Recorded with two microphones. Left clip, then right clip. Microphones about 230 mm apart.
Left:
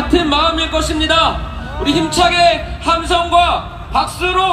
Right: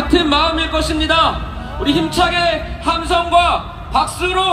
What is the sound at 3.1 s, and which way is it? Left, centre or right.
Speech, centre.